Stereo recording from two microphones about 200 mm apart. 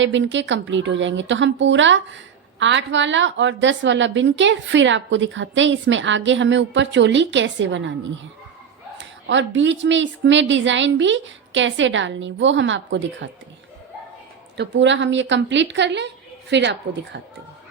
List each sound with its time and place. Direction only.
0.0 s a woman's voice: 65° right (ahead or behind)
14.5 s a woman's voice: 60° right (ahead or behind)